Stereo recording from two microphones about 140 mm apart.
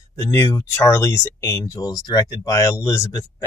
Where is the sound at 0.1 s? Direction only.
20° left (ahead or behind).